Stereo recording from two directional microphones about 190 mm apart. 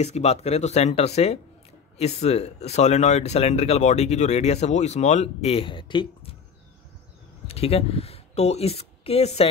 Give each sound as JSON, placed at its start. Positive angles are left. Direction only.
{"t": 0.0, "sound": "speech", "side_deg": 35}
{"t": 7.4, "sound": "speech", "side_deg": 30}